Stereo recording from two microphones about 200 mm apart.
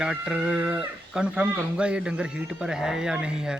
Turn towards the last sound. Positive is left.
turn(degrees=-5)  # may be behind; listen again after turning